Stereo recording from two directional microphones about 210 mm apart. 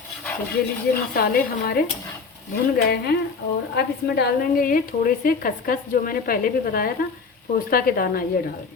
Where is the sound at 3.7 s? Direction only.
50° left (ahead or behind).